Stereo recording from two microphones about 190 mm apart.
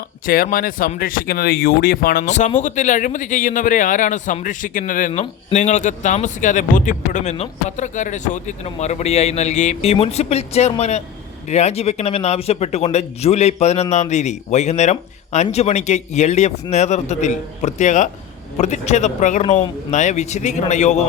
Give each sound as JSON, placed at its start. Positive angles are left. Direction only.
{"t": 0.3, "sound": "a man's voice", "side_deg": 50}
{"t": 5.2, "sound": "speech", "side_deg": 35}